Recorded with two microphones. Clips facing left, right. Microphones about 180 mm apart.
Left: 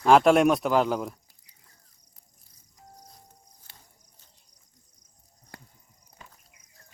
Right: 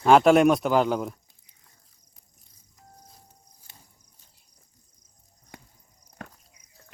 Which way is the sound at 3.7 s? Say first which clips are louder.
Right 1 dB; 20° right (ahead or behind).